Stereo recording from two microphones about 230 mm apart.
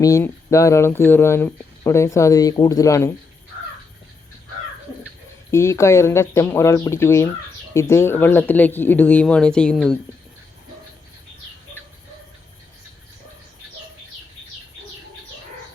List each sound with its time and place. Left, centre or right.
0.0 s speech: centre
5.5 s speech: centre